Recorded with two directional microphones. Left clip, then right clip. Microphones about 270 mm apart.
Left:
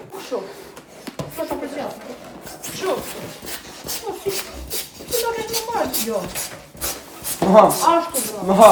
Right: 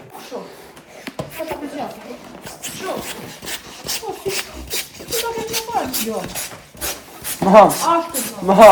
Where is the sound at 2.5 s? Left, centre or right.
Right.